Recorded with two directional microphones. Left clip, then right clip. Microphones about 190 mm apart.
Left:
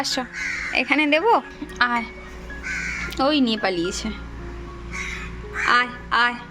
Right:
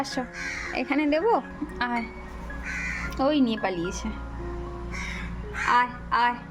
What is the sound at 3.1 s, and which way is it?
Speech, centre (ahead or behind).